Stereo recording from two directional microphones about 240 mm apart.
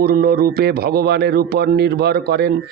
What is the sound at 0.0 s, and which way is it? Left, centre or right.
Speech, right.